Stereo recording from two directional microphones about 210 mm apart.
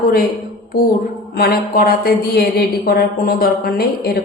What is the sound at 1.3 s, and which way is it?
Speech, 45° left (ahead or behind).